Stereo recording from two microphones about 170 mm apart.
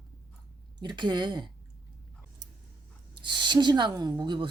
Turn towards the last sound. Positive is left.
turn(degrees=-25)  # may be behind; listen again after turning